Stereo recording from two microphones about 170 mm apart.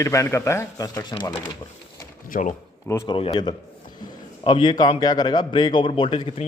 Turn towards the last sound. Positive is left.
turn(degrees=35)  # may be behind; listen again after turning